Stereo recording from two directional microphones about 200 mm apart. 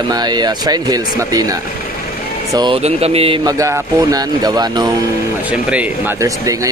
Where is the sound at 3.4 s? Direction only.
15° right (ahead or behind).